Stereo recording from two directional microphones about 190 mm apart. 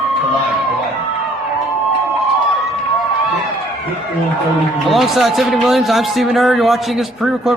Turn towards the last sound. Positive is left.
turn(degrees=0)  # may be behind; listen again after turning